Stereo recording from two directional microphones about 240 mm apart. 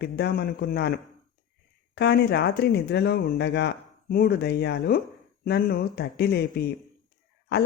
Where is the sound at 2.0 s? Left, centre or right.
Left.